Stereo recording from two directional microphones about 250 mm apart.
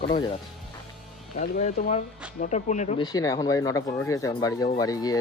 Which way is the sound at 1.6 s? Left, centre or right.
Left.